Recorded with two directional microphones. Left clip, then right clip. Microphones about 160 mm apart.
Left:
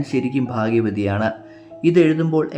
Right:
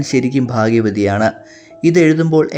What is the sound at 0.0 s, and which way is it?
Speech, 30° right (ahead or behind).